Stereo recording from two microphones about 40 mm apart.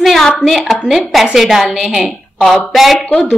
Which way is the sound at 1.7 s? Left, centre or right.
Centre.